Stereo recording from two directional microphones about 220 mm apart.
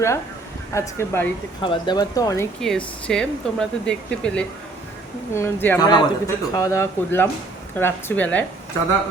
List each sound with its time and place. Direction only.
0.7 s a man's voice: 10° left (ahead or behind)
1.6 s a man's voice: 20° left (ahead or behind)
2.6 s a man's voice: 5° left (ahead or behind)